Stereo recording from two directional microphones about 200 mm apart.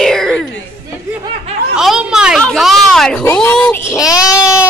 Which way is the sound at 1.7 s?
5° right (ahead or behind).